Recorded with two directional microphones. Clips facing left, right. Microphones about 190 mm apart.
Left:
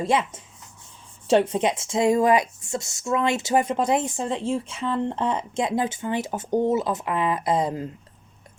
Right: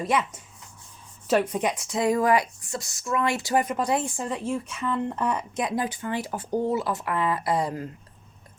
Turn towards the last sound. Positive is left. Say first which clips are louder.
# left 3 dB
turn(degrees=20)  # may be behind; listen again after turning